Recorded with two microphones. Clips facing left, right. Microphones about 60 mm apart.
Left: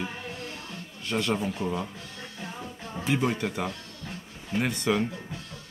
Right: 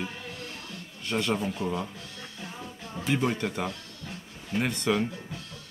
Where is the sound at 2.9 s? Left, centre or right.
Centre.